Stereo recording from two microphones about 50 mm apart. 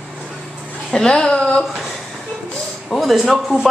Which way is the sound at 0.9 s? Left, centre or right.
Centre.